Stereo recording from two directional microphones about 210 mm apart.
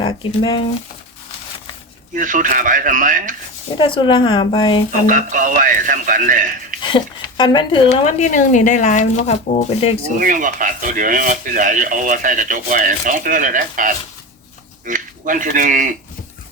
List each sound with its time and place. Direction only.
0.0 s speech: 25° left (ahead or behind)
2.1 s speech: 40° right (ahead or behind)
3.8 s speech: 25° left (ahead or behind)
5.0 s speech: 40° right (ahead or behind)
6.8 s speech: 20° left (ahead or behind)
10.2 s speech: 40° right (ahead or behind)